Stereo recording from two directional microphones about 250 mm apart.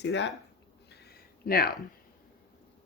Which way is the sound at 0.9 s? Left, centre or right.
Left.